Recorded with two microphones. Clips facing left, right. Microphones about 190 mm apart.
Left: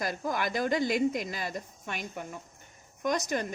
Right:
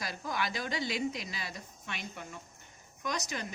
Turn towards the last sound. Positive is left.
turn(degrees=50)  # may be behind; listen again after turning